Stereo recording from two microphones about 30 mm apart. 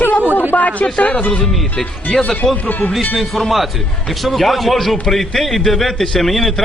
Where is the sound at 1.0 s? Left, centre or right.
Left.